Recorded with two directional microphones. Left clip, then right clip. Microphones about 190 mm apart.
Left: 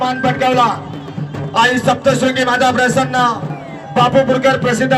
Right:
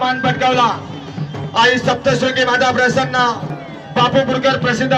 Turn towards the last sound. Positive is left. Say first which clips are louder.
# left 2 dB
turn(degrees=60)  # may be behind; listen again after turning